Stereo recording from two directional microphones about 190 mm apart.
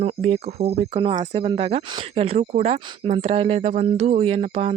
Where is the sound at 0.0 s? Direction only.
30° right (ahead or behind).